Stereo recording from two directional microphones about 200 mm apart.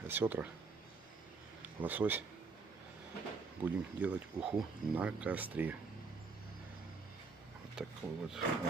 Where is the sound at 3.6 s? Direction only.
15° right (ahead or behind).